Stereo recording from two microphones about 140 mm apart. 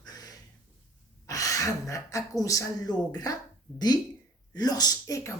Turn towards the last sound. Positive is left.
turn(degrees=25)  # may be behind; listen again after turning